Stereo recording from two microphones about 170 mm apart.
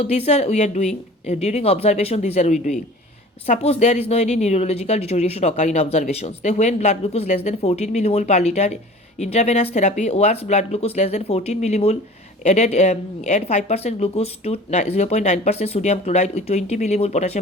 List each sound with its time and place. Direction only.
0.0 s speech: 40° left (ahead or behind)